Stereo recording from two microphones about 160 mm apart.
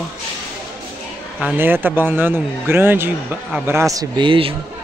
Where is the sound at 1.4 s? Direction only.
10° right (ahead or behind).